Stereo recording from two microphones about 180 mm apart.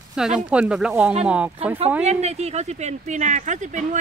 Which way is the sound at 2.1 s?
35° right (ahead or behind).